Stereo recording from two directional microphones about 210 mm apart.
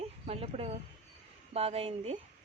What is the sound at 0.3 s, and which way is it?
Speech, 30° right (ahead or behind).